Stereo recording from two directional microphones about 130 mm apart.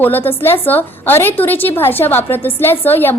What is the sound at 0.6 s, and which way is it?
A woman's voice, 15° left (ahead or behind).